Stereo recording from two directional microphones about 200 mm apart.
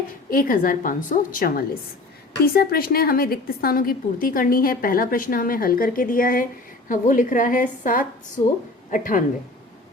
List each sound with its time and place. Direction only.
0.3 s a woman's voice: 45° left (ahead or behind)